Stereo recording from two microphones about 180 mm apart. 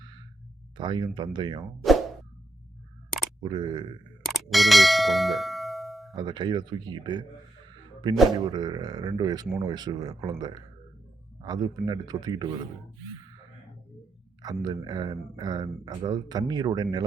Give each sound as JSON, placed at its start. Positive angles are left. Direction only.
{"t": 0.8, "sound": "speech", "side_deg": -25}
{"t": 1.8, "sound": "plop", "side_deg": 0}
{"t": 3.4, "sound": "speech", "side_deg": -25}
{"t": 4.2, "sound": "ding", "side_deg": 0}
{"t": 6.1, "sound": "speech", "side_deg": -25}
{"t": 8.4, "sound": "speech", "side_deg": -20}
{"t": 14.4, "sound": "speech", "side_deg": -20}